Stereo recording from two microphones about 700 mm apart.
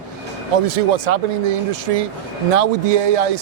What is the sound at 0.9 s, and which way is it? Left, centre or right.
Speech, right.